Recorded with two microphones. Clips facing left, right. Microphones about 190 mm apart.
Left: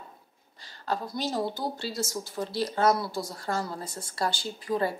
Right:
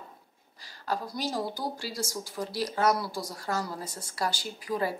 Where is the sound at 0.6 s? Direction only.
25° left (ahead or behind).